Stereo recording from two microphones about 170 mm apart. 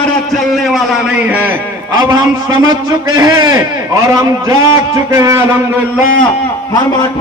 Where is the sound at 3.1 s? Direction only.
25° right (ahead or behind).